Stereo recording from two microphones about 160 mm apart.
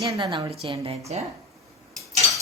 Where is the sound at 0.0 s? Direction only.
30° right (ahead or behind).